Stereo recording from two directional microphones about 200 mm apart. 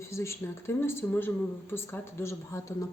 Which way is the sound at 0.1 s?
15° left (ahead or behind).